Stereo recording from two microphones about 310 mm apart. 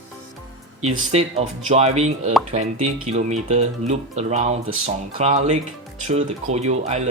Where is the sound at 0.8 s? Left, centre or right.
Right.